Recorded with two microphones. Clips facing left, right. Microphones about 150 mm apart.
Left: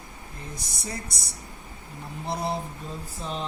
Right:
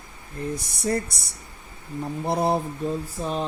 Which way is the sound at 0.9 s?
55° right (ahead or behind).